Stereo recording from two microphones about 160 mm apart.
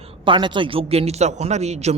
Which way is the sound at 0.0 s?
30° right (ahead or behind).